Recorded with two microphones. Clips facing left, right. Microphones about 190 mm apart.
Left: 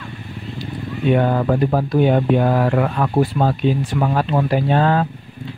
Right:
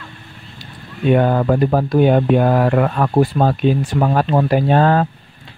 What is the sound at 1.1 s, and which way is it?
Speech, 50° right (ahead or behind).